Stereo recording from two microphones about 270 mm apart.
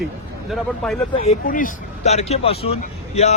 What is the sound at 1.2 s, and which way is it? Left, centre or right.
Speech, left.